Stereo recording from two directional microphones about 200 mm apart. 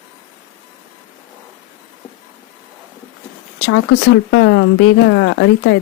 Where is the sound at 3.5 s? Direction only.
60° left (ahead or behind).